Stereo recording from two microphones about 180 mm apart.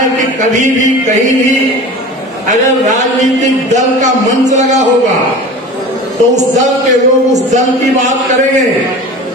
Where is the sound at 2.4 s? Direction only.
40° right (ahead or behind).